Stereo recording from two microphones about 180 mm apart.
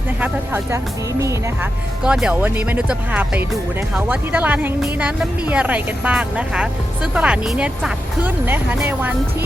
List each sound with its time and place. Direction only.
0.2 s speech: 15° right (ahead or behind)
2.0 s speech: 5° right (ahead or behind)